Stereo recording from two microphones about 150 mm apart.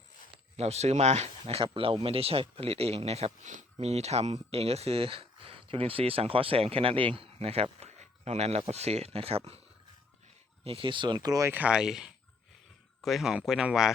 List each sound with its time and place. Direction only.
0.5 s speech: 45° right (ahead or behind)
10.6 s speech: 40° right (ahead or behind); by 13.9 s 5° right (ahead or behind)